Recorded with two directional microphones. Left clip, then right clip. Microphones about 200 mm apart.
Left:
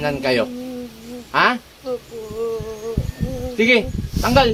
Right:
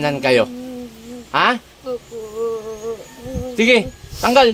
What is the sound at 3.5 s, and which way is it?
Speech, 50° right (ahead or behind).